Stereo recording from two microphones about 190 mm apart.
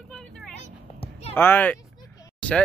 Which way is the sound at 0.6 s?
35° left (ahead or behind).